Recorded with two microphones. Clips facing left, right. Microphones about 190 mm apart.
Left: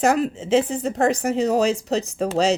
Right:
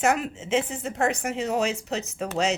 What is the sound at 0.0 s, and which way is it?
A woman's voice, 35° left (ahead or behind).